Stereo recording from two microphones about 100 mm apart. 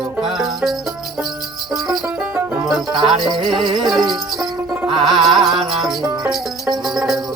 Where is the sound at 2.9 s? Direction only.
50° right (ahead or behind).